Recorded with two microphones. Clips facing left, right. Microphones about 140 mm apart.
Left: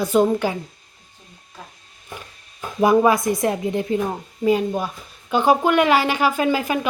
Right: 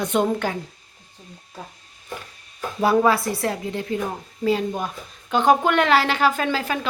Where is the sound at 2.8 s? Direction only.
15° left (ahead or behind).